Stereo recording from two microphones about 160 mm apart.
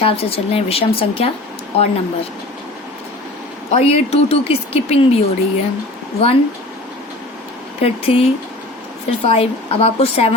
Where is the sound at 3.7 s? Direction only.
40° left (ahead or behind).